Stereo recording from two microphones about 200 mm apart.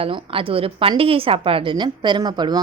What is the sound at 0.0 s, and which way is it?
A woman's voice, 25° right (ahead or behind).